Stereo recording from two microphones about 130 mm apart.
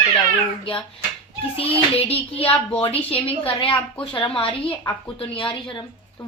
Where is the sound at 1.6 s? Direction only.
45° left (ahead or behind).